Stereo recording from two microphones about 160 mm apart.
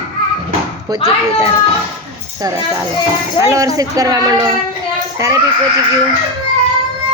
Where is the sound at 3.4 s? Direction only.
20° right (ahead or behind).